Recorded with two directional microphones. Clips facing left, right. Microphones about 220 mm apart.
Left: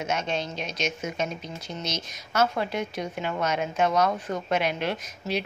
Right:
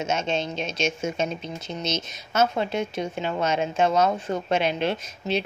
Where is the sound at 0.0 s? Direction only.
25° right (ahead or behind).